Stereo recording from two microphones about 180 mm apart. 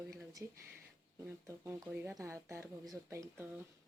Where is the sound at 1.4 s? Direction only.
15° right (ahead or behind).